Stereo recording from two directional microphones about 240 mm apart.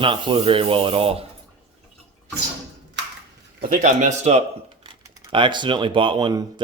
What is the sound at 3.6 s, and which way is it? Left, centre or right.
A man's voice, right.